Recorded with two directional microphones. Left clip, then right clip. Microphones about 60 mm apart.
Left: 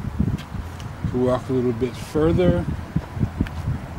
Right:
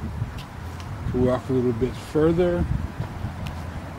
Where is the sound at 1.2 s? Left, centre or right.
Left.